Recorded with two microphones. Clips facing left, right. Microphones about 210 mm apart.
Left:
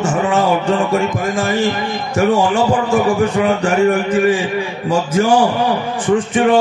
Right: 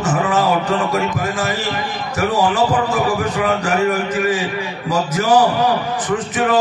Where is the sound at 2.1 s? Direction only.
25° left (ahead or behind).